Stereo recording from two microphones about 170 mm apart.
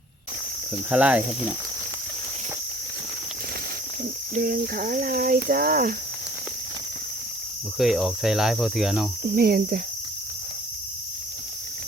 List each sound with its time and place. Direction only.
0.9 s speech: 5° right (ahead or behind)
4.4 s speech: 60° right (ahead or behind)
7.8 s cricket: centre (ahead or behind)
9.2 s speech: 60° right (ahead or behind)